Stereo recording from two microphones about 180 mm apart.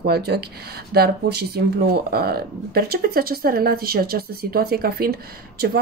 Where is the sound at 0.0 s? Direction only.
65° right (ahead or behind).